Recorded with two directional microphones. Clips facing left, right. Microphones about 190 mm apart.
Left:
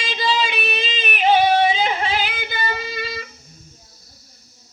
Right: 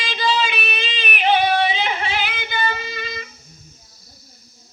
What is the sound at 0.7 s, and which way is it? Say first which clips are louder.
Yodeling: left 2 dB; 25° left (ahead or behind).